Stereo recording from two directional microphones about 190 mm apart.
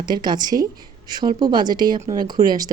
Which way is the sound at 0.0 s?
25° right (ahead or behind).